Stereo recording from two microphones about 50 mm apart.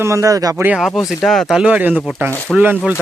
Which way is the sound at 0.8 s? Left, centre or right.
Centre.